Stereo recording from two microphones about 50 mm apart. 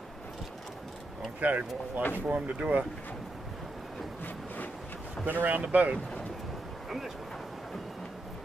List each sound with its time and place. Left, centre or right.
1.4 s speech: right
5.2 s speech: right